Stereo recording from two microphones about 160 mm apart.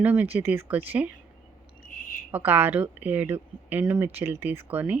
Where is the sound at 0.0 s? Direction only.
10° right (ahead or behind).